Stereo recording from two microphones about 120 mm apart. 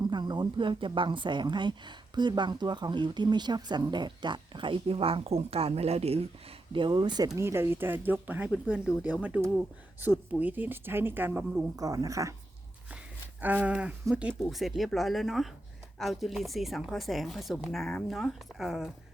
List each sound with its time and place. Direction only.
0.0 s a woman's voice: 35° right (ahead or behind); by 6.2 s 60° right (ahead or behind)
6.7 s a woman's voice: 40° right (ahead or behind)
7.3 s speech: 20° right (ahead or behind)
11.8 s speech: 30° right (ahead or behind)
13.4 s speech: 15° right (ahead or behind)